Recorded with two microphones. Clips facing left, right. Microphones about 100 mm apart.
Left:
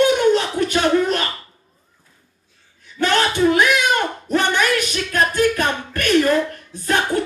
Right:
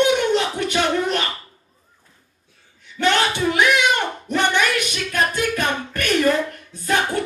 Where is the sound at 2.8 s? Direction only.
40° left (ahead or behind).